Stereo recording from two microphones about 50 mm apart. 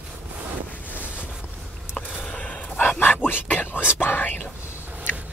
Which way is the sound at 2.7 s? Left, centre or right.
Left.